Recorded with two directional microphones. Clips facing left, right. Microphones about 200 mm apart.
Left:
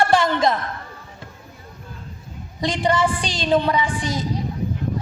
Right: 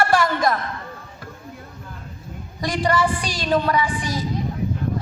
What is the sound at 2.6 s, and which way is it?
A woman's voice, 20° left (ahead or behind).